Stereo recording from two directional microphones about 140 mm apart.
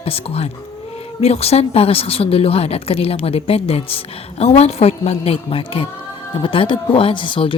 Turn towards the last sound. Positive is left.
turn(degrees=35)  # may be behind; listen again after turning